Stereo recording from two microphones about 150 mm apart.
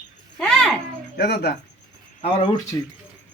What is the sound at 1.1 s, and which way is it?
Speech, 90° left.